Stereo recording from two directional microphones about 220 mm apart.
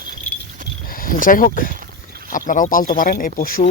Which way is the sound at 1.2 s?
40° left (ahead or behind).